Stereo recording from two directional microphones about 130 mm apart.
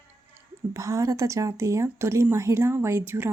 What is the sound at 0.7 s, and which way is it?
Speech, 25° right (ahead or behind).